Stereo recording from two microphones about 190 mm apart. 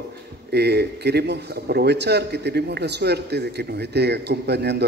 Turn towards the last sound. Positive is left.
turn(degrees=-60)  # may be behind; listen again after turning